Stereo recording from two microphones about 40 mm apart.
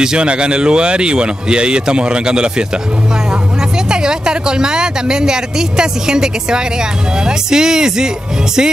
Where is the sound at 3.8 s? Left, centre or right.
Centre.